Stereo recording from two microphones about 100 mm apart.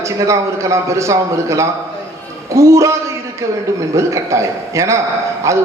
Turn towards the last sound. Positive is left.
turn(degrees=-30)  # may be behind; listen again after turning